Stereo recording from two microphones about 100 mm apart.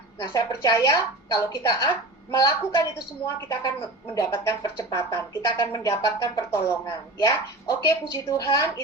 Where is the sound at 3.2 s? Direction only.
30° left (ahead or behind).